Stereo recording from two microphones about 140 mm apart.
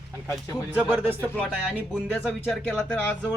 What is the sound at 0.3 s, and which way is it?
Speech, 20° left (ahead or behind).